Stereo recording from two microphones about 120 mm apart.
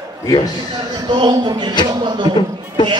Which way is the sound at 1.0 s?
40° right (ahead or behind).